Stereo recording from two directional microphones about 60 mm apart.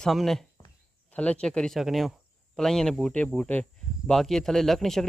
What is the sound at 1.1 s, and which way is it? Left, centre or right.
Speech, centre.